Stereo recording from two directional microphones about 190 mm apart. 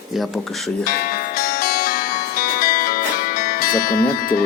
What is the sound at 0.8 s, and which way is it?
Music, 50° left (ahead or behind).